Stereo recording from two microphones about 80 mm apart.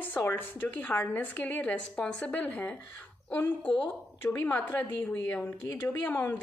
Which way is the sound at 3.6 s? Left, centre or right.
Left.